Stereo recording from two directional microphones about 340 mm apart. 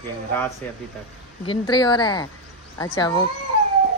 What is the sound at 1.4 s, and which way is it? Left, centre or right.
A woman's voice, centre.